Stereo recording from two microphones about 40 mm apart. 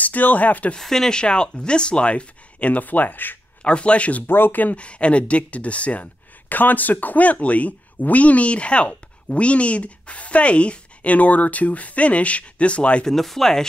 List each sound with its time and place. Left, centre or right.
0.0 s speech: left
0.7 s speech: centre
1.1 s speech: left
3.6 s speech: left
4.3 s speech: left
4.7 s speech: left
6.5 s speech: left
13.0 s speech: centre